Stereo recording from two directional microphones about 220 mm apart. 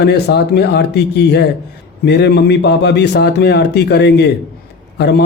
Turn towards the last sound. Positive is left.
turn(degrees=50)  # may be behind; listen again after turning